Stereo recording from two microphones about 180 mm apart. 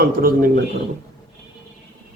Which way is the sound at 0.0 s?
55° right (ahead or behind).